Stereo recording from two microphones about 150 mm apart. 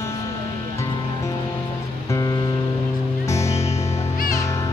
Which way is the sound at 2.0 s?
20° left (ahead or behind).